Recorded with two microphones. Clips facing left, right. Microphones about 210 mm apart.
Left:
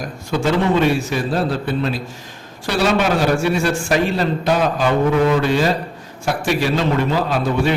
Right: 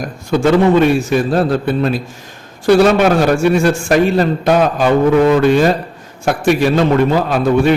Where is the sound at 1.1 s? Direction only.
50° right (ahead or behind).